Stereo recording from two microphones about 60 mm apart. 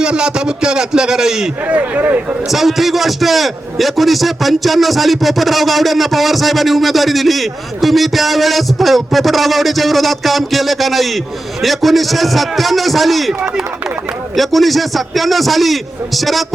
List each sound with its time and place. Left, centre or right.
0.0 s a man's voice: centre
1.6 s speech: right
2.5 s a man's voice: centre
14.3 s a man's voice: centre